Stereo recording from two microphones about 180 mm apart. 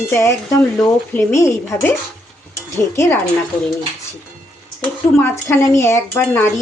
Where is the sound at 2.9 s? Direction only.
15° left (ahead or behind).